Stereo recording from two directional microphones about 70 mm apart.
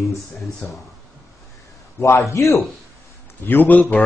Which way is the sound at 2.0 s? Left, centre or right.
Left.